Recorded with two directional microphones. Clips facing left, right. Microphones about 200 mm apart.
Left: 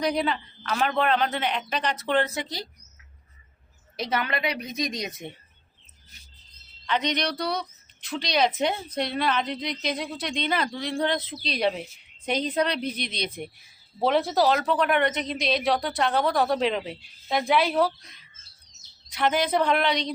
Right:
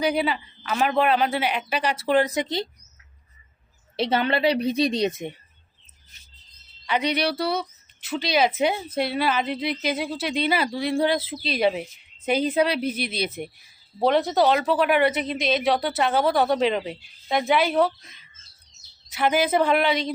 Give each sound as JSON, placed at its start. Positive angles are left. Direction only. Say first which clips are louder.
{"t": 0.0, "sound": "speech", "louder": "right 2 dB", "side_deg": -5}
{"t": 3.9, "sound": "a woman's voice", "louder": "right 6 dB", "side_deg": -30}
{"t": 6.8, "sound": "speech", "louder": "right 3 dB", "side_deg": -10}